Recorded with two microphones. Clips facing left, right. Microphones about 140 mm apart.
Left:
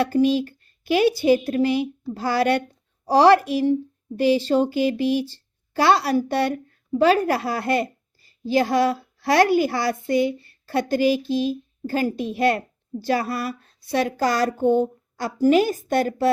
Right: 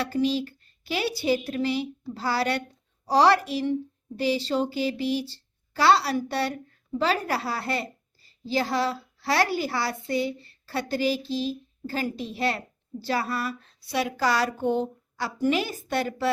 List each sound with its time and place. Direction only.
0.0 s a woman's voice: 50° left (ahead or behind)